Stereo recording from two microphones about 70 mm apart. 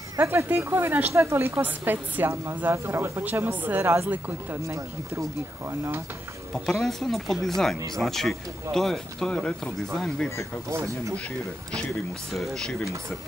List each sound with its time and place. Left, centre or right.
0.2 s speech: right
1.6 s a woman's voice: right
2.7 s a woman's voice: right
4.6 s speech: right
6.5 s speech: centre
10.7 s speech: right
12.4 s speech: centre